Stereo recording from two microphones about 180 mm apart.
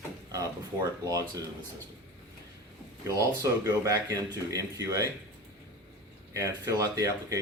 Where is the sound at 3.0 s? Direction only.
20° right (ahead or behind).